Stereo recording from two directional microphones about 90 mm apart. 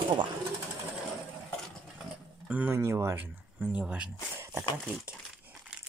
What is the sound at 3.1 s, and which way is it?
Speech, 20° right (ahead or behind).